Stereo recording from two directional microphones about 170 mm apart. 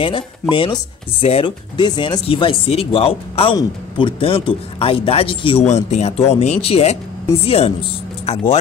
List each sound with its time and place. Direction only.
0.0 s speech: 30° left (ahead or behind)